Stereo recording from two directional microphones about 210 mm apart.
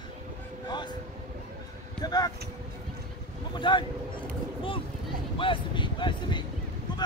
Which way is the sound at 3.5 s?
20° left (ahead or behind).